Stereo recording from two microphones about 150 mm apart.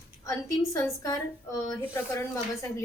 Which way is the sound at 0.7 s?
20° left (ahead or behind).